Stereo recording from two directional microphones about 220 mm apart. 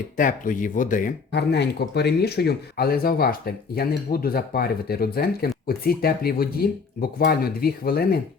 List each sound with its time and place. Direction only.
0.2 s speech: 40° left (ahead or behind)